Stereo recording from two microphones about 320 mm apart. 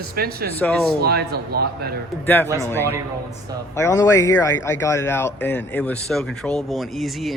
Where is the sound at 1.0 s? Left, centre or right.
Right.